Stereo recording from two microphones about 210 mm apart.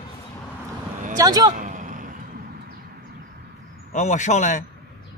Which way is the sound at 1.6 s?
35° right (ahead or behind).